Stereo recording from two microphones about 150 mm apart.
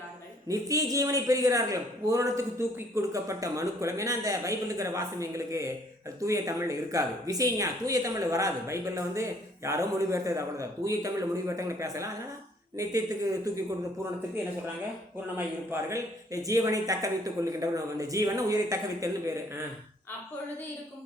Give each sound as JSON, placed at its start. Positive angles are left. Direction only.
{"t": 0.4, "sound": "speech", "side_deg": -20}
{"t": 15.4, "sound": "speech", "side_deg": -20}